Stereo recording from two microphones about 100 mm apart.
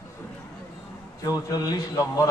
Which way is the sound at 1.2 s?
40° left (ahead or behind).